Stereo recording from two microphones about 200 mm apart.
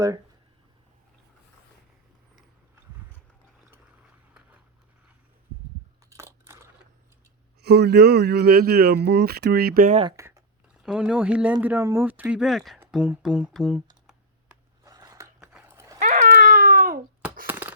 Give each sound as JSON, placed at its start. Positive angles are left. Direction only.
{"t": 3.7, "sound": "a sound", "side_deg": -5}
{"t": 6.1, "sound": "crushing", "side_deg": -15}
{"t": 7.6, "sound": "speech", "side_deg": -55}
{"t": 9.9, "sound": "speech", "side_deg": -25}
{"t": 10.2, "sound": "a sound", "side_deg": -15}
{"t": 10.8, "sound": "speech", "side_deg": -5}
{"t": 14.8, "sound": "biting", "side_deg": -15}
{"t": 15.4, "sound": "dog", "side_deg": -5}
{"t": 16.0, "sound": "baby cry", "side_deg": -40}
{"t": 17.4, "sound": "a sound", "side_deg": -10}